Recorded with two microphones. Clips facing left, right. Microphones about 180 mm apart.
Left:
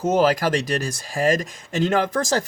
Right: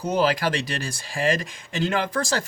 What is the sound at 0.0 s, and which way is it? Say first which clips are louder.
Speech: left 4 dB; 45° left (ahead or behind).